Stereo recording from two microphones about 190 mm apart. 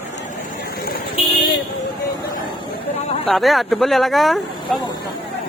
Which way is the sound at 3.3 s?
Centre (ahead or behind).